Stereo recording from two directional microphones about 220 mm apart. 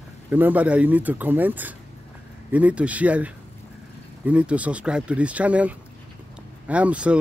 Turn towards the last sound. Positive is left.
turn(degrees=-5)  # may be behind; listen again after turning